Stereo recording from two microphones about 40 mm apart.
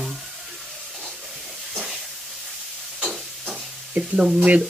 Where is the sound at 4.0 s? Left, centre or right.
Right.